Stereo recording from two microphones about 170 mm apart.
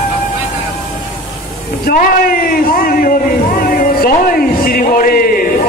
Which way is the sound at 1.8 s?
60° left (ahead or behind).